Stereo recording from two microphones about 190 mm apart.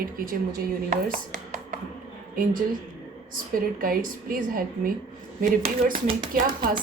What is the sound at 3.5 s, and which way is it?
A woman's voice, 50° right (ahead or behind).